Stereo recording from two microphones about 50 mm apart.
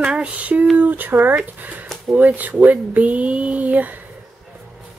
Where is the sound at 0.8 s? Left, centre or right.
Right.